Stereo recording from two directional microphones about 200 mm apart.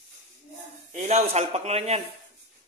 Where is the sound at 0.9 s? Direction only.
35° right (ahead or behind).